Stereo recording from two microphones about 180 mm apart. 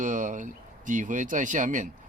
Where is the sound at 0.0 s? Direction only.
45° right (ahead or behind).